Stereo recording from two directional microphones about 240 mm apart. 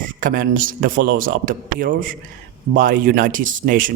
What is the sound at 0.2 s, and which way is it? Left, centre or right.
Speech, right.